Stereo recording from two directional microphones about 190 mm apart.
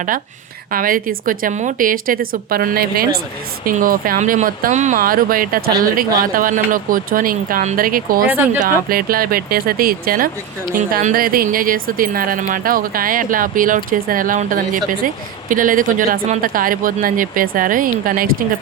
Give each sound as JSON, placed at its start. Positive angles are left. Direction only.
{"t": 0.7, "sound": "speech", "side_deg": -45}